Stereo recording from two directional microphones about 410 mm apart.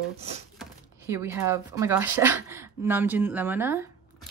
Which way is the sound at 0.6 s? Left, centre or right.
Centre.